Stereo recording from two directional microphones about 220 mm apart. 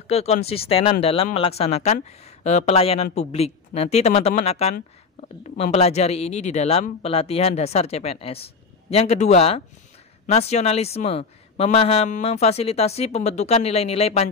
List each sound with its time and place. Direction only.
0.1 s speech: 30° left (ahead or behind)